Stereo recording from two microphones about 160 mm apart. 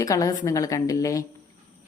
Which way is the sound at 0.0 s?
20° left (ahead or behind).